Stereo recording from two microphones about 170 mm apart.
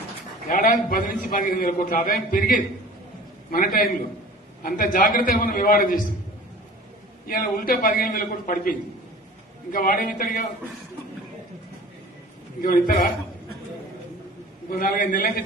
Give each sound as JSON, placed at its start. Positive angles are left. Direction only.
{"t": 0.5, "sound": "a man's voice", "side_deg": 60}
{"t": 7.2, "sound": "a man's voice", "side_deg": 60}
{"t": 9.7, "sound": "a man's voice", "side_deg": 55}
{"t": 12.6, "sound": "a man's voice", "side_deg": 60}
{"t": 14.7, "sound": "a man's voice", "side_deg": 50}